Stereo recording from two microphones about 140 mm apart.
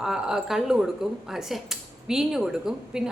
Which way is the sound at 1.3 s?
5° right (ahead or behind).